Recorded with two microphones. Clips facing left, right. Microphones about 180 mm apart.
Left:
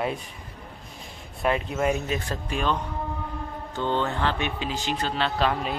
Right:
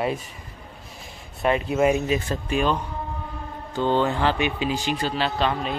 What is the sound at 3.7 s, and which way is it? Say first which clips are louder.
Mantra: right 5 dB; 35° right (ahead or behind).